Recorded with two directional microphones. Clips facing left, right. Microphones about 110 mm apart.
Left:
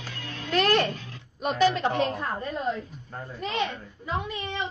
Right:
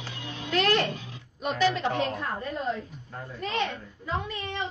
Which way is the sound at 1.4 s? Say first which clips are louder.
Left 2 dB; 45° left (ahead or behind).